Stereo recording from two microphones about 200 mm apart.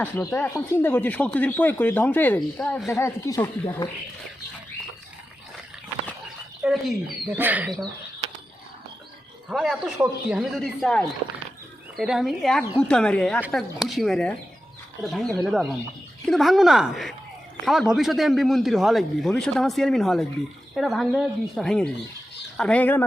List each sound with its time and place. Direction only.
0.0 s speech: 10° left (ahead or behind)
3.0 s speech: 15° left (ahead or behind)
6.6 s speech: 5° right (ahead or behind)
9.5 s speech: centre (ahead or behind)